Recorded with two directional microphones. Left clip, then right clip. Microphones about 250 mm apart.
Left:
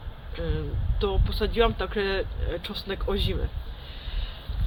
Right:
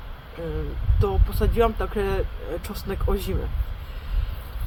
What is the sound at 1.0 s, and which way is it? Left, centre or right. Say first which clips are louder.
Speech: right 2 dB; centre.